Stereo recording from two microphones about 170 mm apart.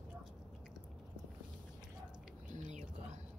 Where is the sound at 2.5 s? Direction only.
45° right (ahead or behind).